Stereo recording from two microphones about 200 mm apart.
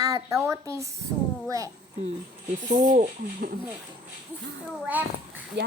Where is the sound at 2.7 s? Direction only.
35° right (ahead or behind).